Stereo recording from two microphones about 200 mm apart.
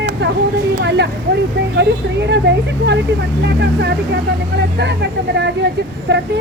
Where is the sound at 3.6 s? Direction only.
60° right (ahead or behind).